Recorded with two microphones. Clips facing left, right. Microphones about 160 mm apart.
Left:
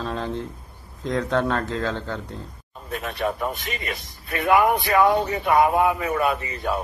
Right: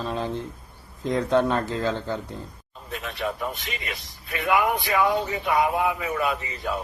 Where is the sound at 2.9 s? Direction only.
50° left (ahead or behind).